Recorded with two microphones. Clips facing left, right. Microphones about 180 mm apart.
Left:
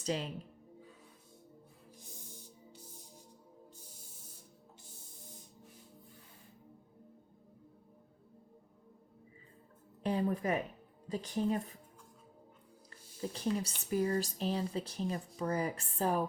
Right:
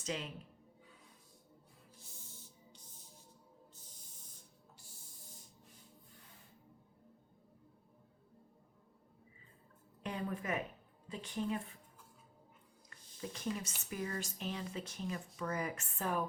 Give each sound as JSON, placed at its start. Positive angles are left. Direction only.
{"t": 0.0, "sound": "a woman's voice", "side_deg": 35}
{"t": 2.0, "sound": "music", "side_deg": 15}
{"t": 10.0, "sound": "speech", "side_deg": 35}
{"t": 13.2, "sound": "speech", "side_deg": 35}